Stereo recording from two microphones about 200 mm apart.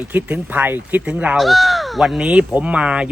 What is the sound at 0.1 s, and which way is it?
A man's voice, 10° right (ahead or behind).